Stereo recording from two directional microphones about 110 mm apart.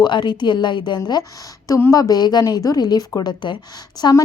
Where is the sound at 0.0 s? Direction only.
45° left (ahead or behind).